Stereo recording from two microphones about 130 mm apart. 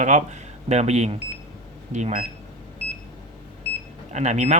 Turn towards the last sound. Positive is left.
turn(degrees=-60)  # may be behind; listen again after turning